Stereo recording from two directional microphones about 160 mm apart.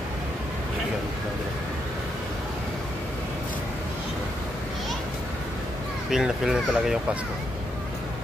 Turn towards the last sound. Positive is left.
turn(degrees=-5)  # may be behind; listen again after turning